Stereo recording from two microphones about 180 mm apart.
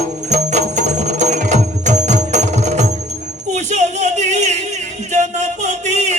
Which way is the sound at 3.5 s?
40° right (ahead or behind).